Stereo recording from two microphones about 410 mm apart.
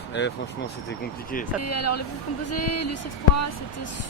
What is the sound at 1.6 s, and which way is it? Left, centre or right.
Speech, left.